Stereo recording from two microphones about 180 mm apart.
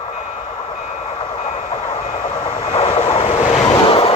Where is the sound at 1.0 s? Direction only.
30° left (ahead or behind).